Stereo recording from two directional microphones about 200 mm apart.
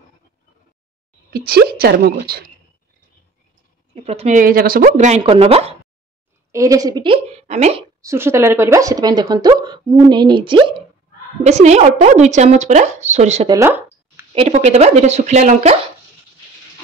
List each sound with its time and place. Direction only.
1.3 s a woman's voice: 50° right (ahead or behind)
3.9 s speech: 30° right (ahead or behind); by 4.8 s 45° right (ahead or behind)
4.8 s a woman's voice: 35° right (ahead or behind)
6.5 s a woman's voice: 15° right (ahead or behind); by 7.8 s 35° right (ahead or behind)
8.0 s speech: 15° right (ahead or behind)
11.4 s a woman's voice: 35° right (ahead or behind)
13.5 s a sound: 15° right (ahead or behind)
14.3 s a woman's voice: 30° right (ahead or behind)